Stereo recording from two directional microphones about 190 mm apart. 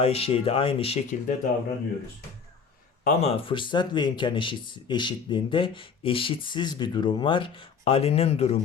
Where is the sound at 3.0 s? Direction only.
35° left (ahead or behind).